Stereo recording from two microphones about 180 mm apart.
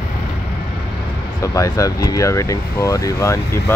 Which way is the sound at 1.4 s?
20° left (ahead or behind).